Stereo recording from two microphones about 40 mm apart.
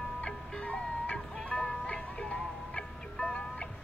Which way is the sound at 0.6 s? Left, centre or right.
Left.